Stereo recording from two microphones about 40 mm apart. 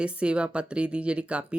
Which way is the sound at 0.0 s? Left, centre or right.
Right.